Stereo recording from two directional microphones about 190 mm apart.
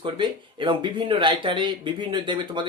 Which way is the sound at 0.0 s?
25° right (ahead or behind).